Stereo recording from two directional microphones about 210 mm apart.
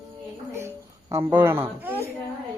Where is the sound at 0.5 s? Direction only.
15° right (ahead or behind).